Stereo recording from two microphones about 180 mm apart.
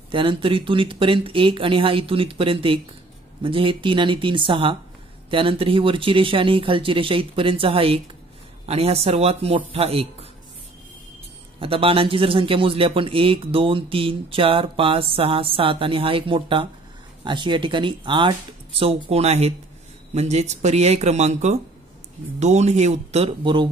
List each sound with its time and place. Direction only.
0.1 s a man's voice: 30° right (ahead or behind)
11.6 s a man's voice: 30° right (ahead or behind)